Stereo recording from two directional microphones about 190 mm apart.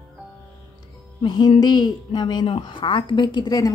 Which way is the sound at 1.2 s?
25° left (ahead or behind).